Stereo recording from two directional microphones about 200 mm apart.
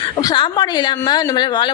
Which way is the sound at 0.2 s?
20° left (ahead or behind).